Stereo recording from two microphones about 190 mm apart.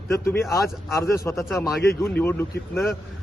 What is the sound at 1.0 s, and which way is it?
A man's voice, 15° left (ahead or behind).